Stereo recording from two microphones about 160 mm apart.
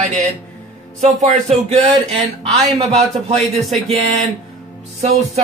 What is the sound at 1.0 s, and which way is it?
Speech, 45° right (ahead or behind).